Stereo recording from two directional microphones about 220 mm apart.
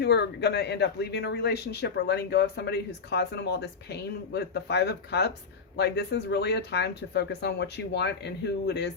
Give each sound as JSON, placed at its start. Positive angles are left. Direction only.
{"t": 0.0, "sound": "speech", "side_deg": 50}